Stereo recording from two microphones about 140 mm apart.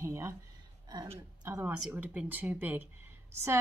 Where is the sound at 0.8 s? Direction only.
30° right (ahead or behind).